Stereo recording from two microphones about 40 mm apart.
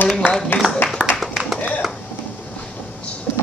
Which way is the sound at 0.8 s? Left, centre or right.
Left.